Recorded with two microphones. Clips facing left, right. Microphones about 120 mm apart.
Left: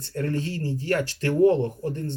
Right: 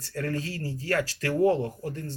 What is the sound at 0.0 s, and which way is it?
Speech, 25° left (ahead or behind).